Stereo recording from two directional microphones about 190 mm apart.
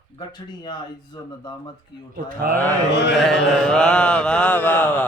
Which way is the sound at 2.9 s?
65° left (ahead or behind).